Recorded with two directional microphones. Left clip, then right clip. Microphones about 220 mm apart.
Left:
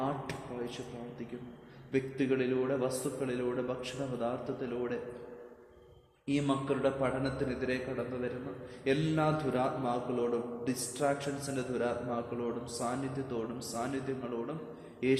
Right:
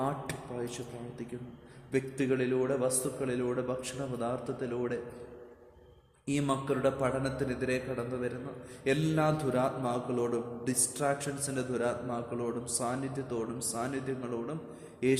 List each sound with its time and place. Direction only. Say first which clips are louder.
0.0 s a sound: right 1 dB; 50° right (ahead or behind)
1.9 s a man's voice: right 1 dB; 50° right (ahead or behind)
6.2 s a man's voice: right 1 dB; 50° right (ahead or behind)
8.8 s a man's voice: right 1 dB; 50° right (ahead or behind)